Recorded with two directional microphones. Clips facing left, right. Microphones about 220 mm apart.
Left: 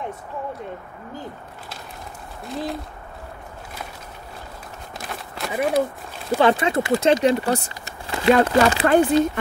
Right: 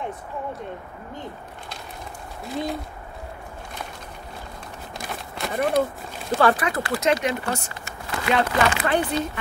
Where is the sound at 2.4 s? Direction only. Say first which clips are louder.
Even; centre (ahead or behind).